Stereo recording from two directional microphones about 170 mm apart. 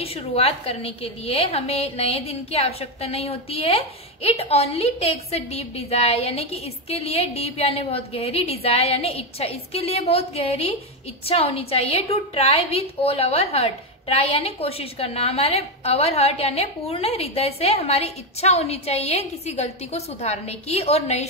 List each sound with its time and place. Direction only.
0.0 s a woman's voice: 35° left (ahead or behind)